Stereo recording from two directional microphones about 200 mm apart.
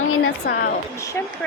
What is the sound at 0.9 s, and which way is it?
Speech, 15° left (ahead or behind).